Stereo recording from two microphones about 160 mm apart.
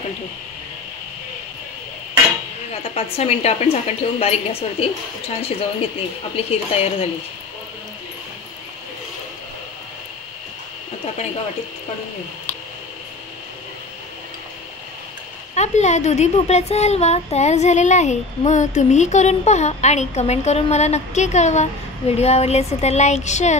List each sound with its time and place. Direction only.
2.7 s a woman's voice: 40° left (ahead or behind)
15.5 s a woman's voice: 45° left (ahead or behind)